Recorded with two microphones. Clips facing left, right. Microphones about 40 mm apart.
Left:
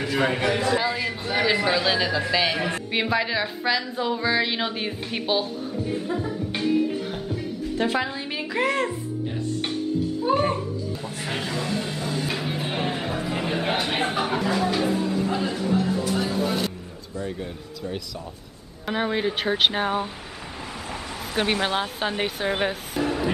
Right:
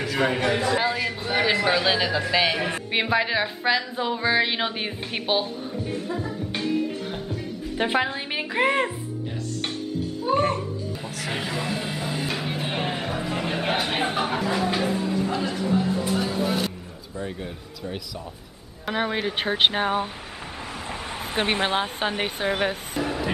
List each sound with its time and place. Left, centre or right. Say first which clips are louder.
0.0 s a man's voice: even; centre
0.7 s a woman's voice: right 1 dB; centre
5.9 s music: left 2 dB; centre
7.7 s speech: right 2 dB; right
10.9 s music: even; centre
14.7 s a man's voice: left 1 dB; centre
18.9 s a woman's voice: left 1 dB; centre
21.4 s speech: even; right
22.2 s a woman's voice: even; centre